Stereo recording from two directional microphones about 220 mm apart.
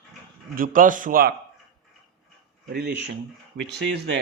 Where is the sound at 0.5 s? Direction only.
40° right (ahead or behind).